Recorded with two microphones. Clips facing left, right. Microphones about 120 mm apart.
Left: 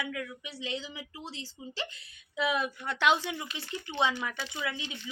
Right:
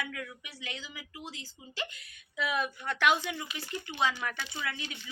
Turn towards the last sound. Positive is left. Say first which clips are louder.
# left 2 dB
turn(degrees=20)  # may be behind; listen again after turning